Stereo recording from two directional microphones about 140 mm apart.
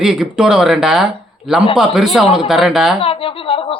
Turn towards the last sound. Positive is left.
turn(degrees=40)  # may be behind; listen again after turning